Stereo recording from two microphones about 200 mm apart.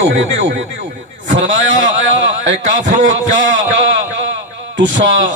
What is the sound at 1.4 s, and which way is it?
Speech, 40° right (ahead or behind).